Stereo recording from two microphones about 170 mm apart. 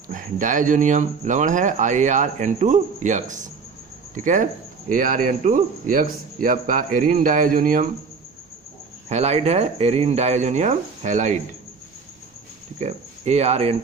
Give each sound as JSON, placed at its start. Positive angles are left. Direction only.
{"t": 0.1, "sound": "speech", "side_deg": -50}
{"t": 9.0, "sound": "speech", "side_deg": -40}
{"t": 12.8, "sound": "speech", "side_deg": -40}